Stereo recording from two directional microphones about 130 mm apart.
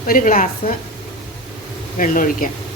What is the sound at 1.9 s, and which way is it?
Speech, 90° left.